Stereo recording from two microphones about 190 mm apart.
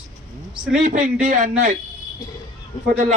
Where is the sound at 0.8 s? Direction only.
45° right (ahead or behind).